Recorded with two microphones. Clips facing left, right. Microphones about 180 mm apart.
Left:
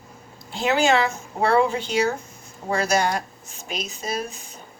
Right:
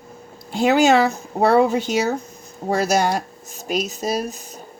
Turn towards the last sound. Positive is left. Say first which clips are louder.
# right 5 dB
turn(degrees=-40)  # may be behind; listen again after turning